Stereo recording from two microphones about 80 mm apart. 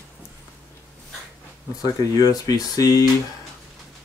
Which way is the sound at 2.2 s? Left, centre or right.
Left.